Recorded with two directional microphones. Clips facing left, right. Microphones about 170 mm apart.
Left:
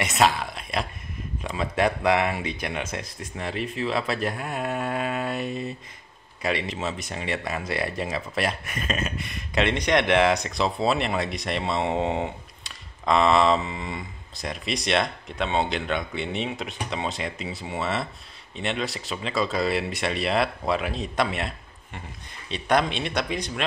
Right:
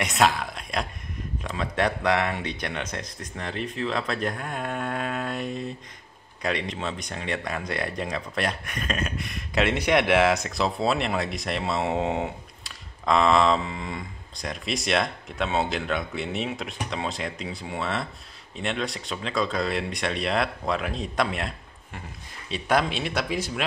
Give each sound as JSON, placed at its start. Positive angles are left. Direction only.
{"t": 0.0, "sound": "speech", "side_deg": 0}